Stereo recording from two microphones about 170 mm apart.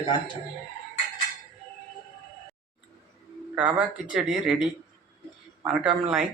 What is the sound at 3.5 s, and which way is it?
Speech, 10° right (ahead or behind).